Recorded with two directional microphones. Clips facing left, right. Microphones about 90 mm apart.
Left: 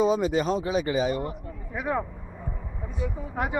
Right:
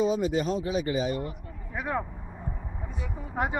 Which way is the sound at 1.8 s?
5° left (ahead or behind).